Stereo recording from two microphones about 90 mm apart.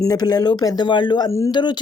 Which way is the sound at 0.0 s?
45° left (ahead or behind).